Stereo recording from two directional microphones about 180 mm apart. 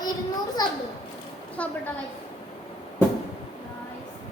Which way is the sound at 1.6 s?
5° left (ahead or behind).